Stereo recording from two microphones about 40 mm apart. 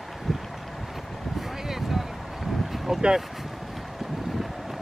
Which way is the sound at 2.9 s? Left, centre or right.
Centre.